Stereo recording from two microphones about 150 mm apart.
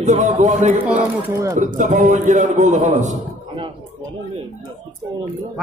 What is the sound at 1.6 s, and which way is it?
A man's voice, 55° right (ahead or behind).